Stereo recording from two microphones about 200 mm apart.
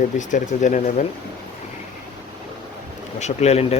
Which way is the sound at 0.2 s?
40° left (ahead or behind).